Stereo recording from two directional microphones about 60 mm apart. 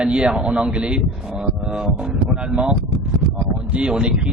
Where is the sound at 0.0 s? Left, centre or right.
Centre.